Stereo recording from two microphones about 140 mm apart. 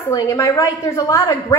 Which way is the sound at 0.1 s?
25° left (ahead or behind).